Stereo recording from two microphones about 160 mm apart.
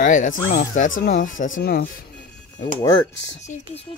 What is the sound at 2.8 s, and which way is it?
Speech, 25° left (ahead or behind).